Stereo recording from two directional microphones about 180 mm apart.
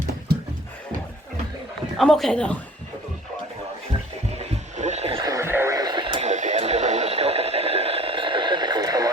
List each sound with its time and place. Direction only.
2.0 s speech: centre (ahead or behind)
4.4 s a sound: 35° right (ahead or behind)
5.2 s radio: 15° right (ahead or behind)